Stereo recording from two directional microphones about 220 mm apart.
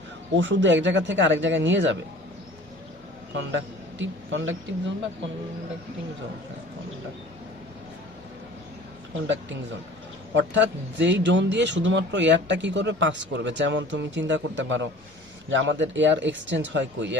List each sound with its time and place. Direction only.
0.3 s speech: 55° right (ahead or behind)
3.3 s speech: 60° right (ahead or behind)
9.2 s speech: 55° right (ahead or behind)